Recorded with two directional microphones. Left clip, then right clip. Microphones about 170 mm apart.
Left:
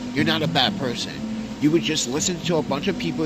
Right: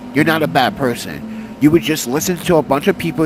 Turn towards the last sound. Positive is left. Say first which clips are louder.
# right 9 dB
turn(degrees=-50)  # may be behind; listen again after turning